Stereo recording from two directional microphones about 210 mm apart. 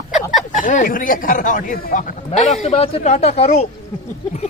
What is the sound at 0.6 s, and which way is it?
A man's voice, 40° left (ahead or behind).